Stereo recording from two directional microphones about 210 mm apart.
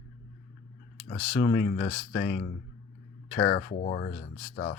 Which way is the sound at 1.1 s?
35° left (ahead or behind).